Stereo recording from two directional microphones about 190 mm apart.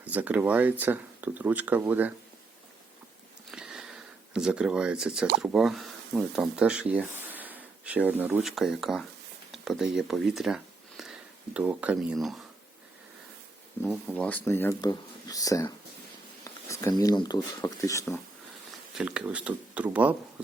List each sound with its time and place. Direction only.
0.0 s speech: 10° right (ahead or behind)
3.5 s sniff: 5° right (ahead or behind)
4.4 s speech: 5° right (ahead or behind)
13.9 s speech: 5° left (ahead or behind)
16.4 s a sound: 15° left (ahead or behind)
17.0 s speech: 20° left (ahead or behind)
18.9 s speech: 5° right (ahead or behind)